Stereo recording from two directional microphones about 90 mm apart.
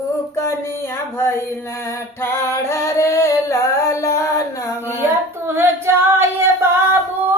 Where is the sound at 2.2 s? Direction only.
30° left (ahead or behind).